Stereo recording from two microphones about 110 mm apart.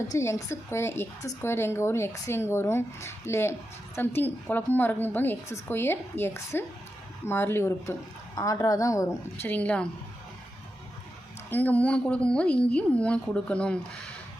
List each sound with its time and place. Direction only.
0.1 s speech: 30° left (ahead or behind)
9.5 s a woman's voice: 15° left (ahead or behind)
11.5 s a woman's voice: 15° left (ahead or behind)